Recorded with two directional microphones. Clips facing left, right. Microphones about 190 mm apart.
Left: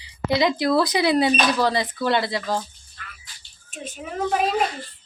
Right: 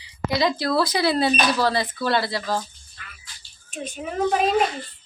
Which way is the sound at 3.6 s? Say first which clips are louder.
Right 3 dB; centre (ahead or behind).